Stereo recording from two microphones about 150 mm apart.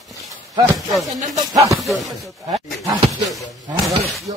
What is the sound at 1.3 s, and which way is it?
Speech, 25° right (ahead or behind).